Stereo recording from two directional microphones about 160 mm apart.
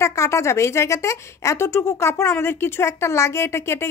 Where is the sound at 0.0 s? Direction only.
20° left (ahead or behind).